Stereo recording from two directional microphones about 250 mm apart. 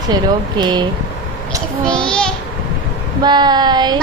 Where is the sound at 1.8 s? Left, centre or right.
Centre.